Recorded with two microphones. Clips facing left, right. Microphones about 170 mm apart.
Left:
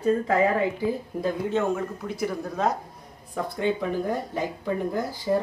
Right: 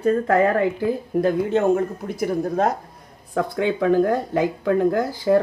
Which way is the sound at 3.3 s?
80° right.